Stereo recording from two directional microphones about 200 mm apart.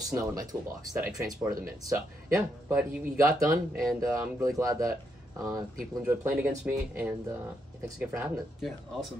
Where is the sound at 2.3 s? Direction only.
5° right (ahead or behind).